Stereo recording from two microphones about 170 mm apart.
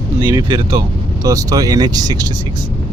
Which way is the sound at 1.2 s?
20° right (ahead or behind).